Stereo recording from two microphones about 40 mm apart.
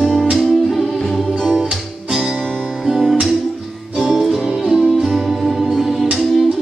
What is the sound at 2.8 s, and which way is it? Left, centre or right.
Music, centre.